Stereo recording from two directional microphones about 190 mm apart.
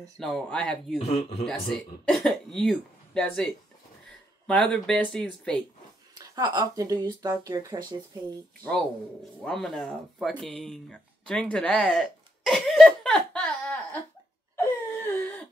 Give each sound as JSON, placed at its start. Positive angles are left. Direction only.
{"t": 0.2, "sound": "speech", "side_deg": 5}
{"t": 0.9, "sound": "a man's voice", "side_deg": 35}
{"t": 1.4, "sound": "speech", "side_deg": 5}
{"t": 4.5, "sound": "speech", "side_deg": 5}
{"t": 6.1, "sound": "speech", "side_deg": -20}
{"t": 9.4, "sound": "speech", "side_deg": 5}
{"t": 14.6, "sound": "a sound", "side_deg": 10}